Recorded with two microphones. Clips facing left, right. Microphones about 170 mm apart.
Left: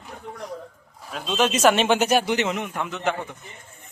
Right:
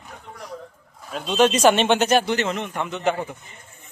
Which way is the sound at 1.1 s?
Centre (ahead or behind).